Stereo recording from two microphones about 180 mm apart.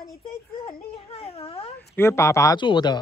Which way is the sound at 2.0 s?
15° left (ahead or behind).